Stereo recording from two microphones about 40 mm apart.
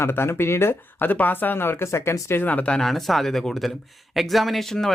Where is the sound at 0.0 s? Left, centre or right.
Left.